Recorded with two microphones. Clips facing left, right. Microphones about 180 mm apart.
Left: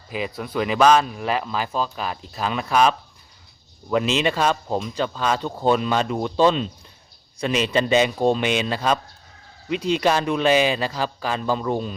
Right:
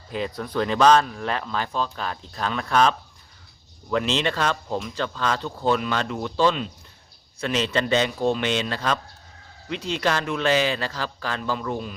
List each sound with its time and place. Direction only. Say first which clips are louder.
0.1 s a man's voice: left 1 dB; 5° left (ahead or behind)
3.9 s a man's voice: left 3 dB; 15° left (ahead or behind)